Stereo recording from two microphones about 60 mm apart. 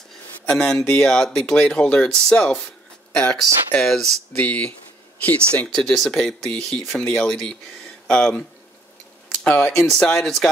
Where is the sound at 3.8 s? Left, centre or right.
Centre.